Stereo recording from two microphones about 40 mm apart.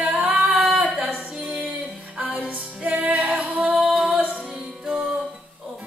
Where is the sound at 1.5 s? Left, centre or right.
Right.